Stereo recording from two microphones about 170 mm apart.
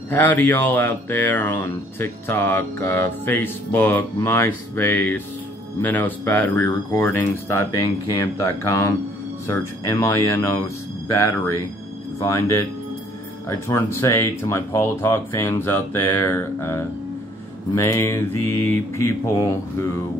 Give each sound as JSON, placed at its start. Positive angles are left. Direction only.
{"t": 0.1, "sound": "speech", "side_deg": 10}
{"t": 12.2, "sound": "speech", "side_deg": 15}